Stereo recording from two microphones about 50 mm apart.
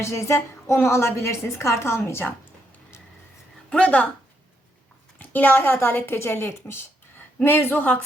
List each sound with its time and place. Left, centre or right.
0.0 s a woman's voice: left
0.3 s a woman's voice: left
3.7 s a woman's voice: left
5.2 s a woman's voice: left
7.4 s a woman's voice: left